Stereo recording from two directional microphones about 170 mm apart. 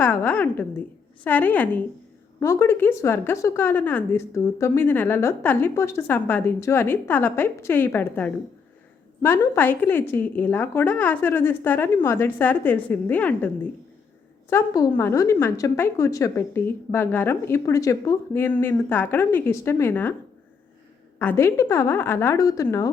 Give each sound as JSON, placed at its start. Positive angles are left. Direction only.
{"t": 0.0, "sound": "speech", "side_deg": 10}
{"t": 14.5, "sound": "speech", "side_deg": 20}
{"t": 21.2, "sound": "speech", "side_deg": 10}